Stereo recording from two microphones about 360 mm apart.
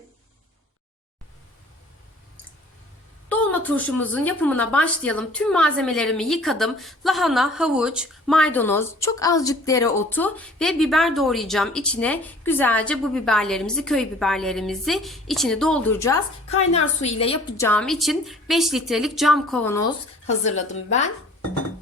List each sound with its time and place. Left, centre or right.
3.2 s a woman's voice: centre